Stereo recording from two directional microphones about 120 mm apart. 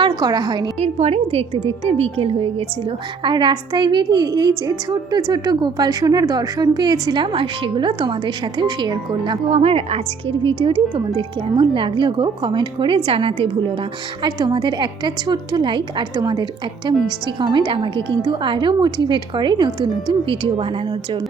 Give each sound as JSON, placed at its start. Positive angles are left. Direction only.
{"t": 0.0, "sound": "a woman's voice", "side_deg": -35}
{"t": 0.8, "sound": "a woman's voice", "side_deg": -60}
{"t": 3.2, "sound": "a woman's voice", "side_deg": -40}
{"t": 9.5, "sound": "a woman's voice", "side_deg": -60}
{"t": 10.4, "sound": "a woman's voice", "side_deg": -45}